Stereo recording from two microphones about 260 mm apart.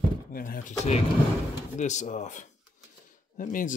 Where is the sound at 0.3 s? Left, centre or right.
Left.